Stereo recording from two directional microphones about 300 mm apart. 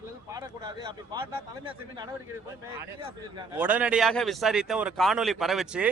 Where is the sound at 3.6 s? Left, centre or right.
Centre.